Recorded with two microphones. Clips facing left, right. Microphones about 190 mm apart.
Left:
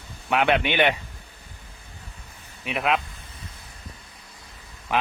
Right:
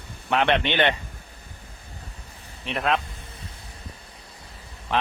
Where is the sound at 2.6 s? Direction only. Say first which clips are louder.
Even; 5° left (ahead or behind).